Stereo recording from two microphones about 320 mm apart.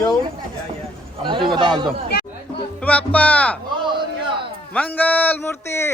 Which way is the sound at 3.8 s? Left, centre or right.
Centre.